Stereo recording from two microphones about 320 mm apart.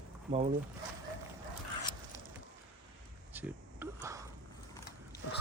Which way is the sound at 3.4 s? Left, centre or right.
Centre.